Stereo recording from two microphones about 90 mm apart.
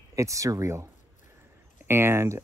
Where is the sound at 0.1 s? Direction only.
35° right (ahead or behind).